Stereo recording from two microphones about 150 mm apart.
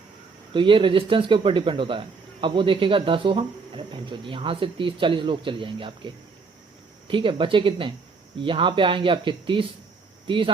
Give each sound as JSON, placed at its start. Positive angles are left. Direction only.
{"t": 0.5, "sound": "speech", "side_deg": -35}
{"t": 7.1, "sound": "speech", "side_deg": -35}